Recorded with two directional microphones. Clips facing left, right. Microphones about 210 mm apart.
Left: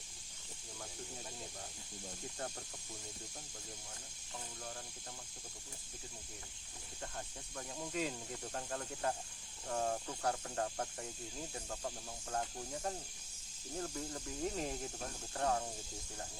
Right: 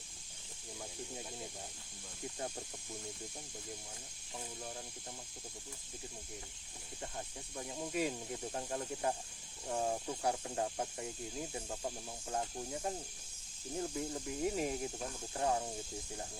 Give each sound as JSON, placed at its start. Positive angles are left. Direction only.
{"t": 7.5, "sound": "speech", "side_deg": -10}